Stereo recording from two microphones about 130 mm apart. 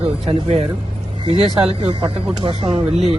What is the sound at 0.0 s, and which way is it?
Speech, 50° right (ahead or behind).